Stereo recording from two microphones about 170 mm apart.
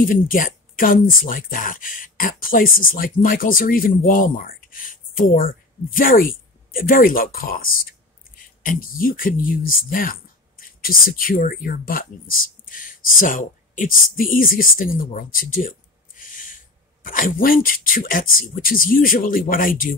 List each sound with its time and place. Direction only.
0.0 s speech: 55° left (ahead or behind)